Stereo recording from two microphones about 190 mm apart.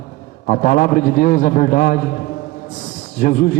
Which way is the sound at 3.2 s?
45° left (ahead or behind).